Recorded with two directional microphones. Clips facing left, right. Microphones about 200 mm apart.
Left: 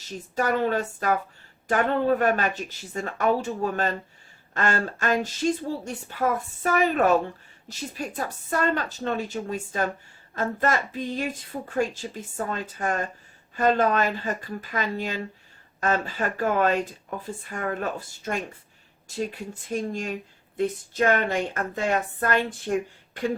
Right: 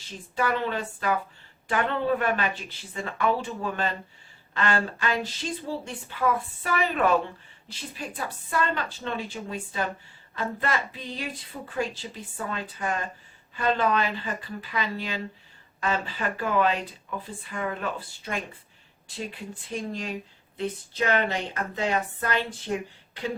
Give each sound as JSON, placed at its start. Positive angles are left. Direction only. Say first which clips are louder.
{"t": 0.1, "sound": "speech", "louder": "left 2 dB", "side_deg": 45}